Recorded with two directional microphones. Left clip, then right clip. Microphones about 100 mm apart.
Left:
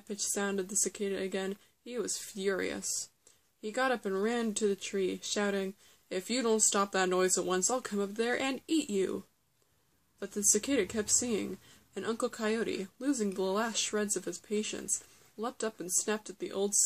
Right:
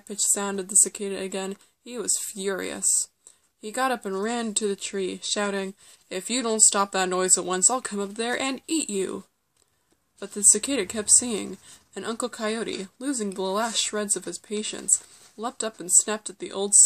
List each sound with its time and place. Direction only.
0.1 s speech: 40° right (ahead or behind)